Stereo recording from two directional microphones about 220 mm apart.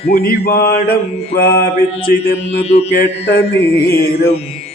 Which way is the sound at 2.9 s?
50° left (ahead or behind).